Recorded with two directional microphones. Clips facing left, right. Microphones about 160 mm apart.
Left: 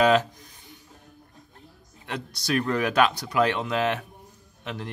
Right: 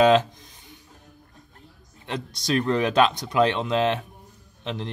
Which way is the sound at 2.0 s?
20° right (ahead or behind).